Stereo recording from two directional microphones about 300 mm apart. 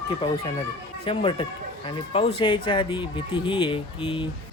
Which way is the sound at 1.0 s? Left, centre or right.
Centre.